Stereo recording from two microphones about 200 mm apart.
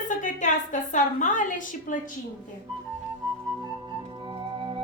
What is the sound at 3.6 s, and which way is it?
Music, 25° right (ahead or behind).